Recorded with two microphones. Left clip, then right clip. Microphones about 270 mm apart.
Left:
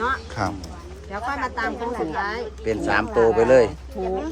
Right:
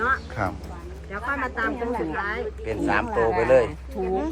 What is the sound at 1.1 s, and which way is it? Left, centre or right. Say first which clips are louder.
Speech: left 1 dB; left.